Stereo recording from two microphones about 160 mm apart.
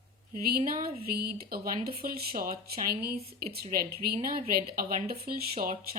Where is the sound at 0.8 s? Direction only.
70° right (ahead or behind).